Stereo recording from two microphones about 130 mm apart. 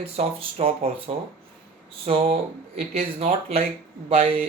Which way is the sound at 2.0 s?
55° right (ahead or behind).